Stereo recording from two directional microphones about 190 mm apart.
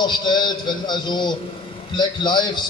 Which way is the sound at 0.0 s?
25° left (ahead or behind).